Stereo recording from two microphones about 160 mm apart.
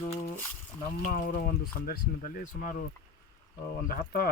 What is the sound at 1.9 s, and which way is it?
Speech, 60° left (ahead or behind).